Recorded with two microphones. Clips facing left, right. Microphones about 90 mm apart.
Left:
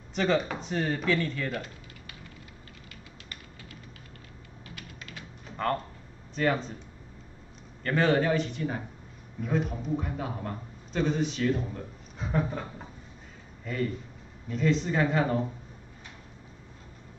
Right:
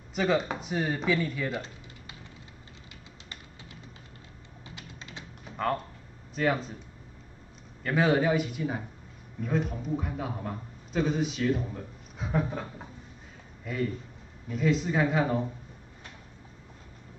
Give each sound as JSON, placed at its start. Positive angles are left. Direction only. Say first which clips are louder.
{"t": 0.1, "sound": "a man's voice", "louder": "even", "side_deg": -5}
{"t": 1.5, "sound": "typing", "louder": "even", "side_deg": -25}
{"t": 4.7, "sound": "typing", "louder": "even", "side_deg": -20}
{"t": 5.6, "sound": "speech", "louder": "even", "side_deg": 0}
{"t": 7.8, "sound": "a man's voice", "louder": "even", "side_deg": -5}